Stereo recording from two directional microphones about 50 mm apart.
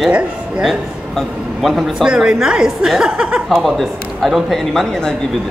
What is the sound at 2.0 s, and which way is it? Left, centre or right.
A woman's voice, centre.